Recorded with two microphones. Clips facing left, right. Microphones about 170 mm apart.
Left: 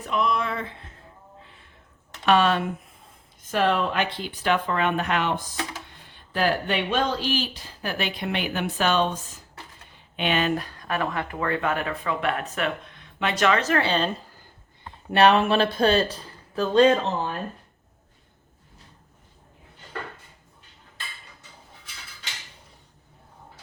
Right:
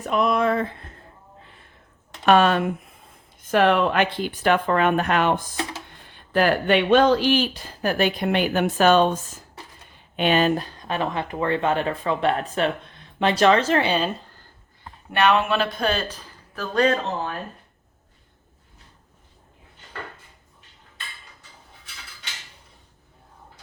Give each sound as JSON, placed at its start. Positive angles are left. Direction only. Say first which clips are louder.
{"t": 0.0, "sound": "speech", "louder": "right 5 dB", "side_deg": -50}
{"t": 2.2, "sound": "speech", "louder": "right 3 dB", "side_deg": -50}
{"t": 3.5, "sound": "speech", "louder": "right 5 dB", "side_deg": -65}
{"t": 6.3, "sound": "speech", "louder": "right 5 dB", "side_deg": -65}
{"t": 10.2, "sound": "speech", "louder": "right 4 dB", "side_deg": -40}
{"t": 13.8, "sound": "speech", "louder": "right 1 dB", "side_deg": -10}
{"t": 15.1, "sound": "speech", "louder": "left 2 dB", "side_deg": 35}